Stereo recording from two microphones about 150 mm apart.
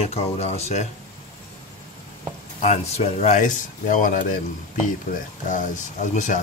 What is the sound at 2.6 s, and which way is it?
Speech, 45° left (ahead or behind).